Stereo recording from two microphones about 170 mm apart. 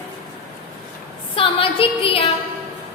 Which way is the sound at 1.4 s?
30° left (ahead or behind).